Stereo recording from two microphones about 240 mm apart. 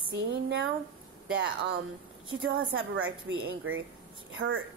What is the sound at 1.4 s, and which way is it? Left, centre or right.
A woman's voice, right.